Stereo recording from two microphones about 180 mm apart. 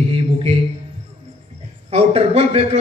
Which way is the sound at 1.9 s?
35° right (ahead or behind).